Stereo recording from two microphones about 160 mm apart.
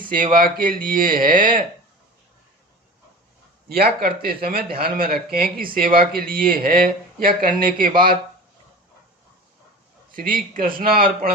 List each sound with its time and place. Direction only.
0.1 s speech: 60° right (ahead or behind)
3.7 s speech: 75° right (ahead or behind)
10.1 s speech: 60° right (ahead or behind)